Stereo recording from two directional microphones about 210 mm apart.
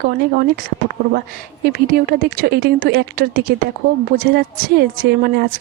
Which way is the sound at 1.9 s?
45° right (ahead or behind).